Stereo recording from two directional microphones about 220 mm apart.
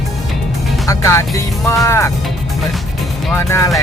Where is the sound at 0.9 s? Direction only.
15° left (ahead or behind).